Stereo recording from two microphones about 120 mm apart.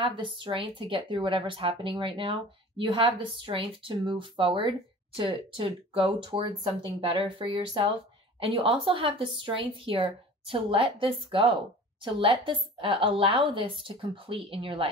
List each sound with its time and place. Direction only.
0.0 s speech: 45° right (ahead or behind)